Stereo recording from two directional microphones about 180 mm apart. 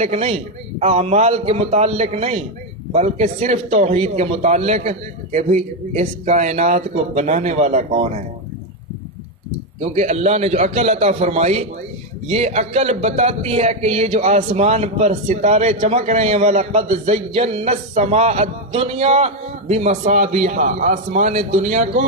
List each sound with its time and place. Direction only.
0.0 s speech: 35° right (ahead or behind)
9.8 s speech: 35° right (ahead or behind)